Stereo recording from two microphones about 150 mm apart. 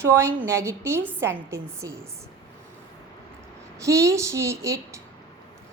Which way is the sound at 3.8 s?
20° right (ahead or behind).